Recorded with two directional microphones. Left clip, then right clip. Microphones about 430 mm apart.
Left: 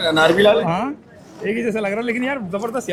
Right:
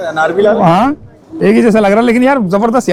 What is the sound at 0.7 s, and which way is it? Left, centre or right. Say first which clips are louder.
Speech: right 12 dB; right.